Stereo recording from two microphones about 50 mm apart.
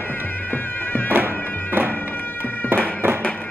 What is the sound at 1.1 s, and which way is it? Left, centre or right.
Music, right.